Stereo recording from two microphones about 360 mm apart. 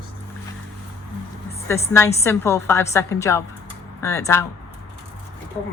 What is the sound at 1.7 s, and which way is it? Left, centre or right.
A woman's voice, centre.